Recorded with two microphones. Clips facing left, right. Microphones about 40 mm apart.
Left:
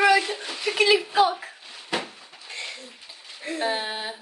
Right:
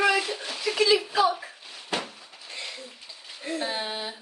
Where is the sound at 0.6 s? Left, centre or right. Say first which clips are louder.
Left 2 dB; left.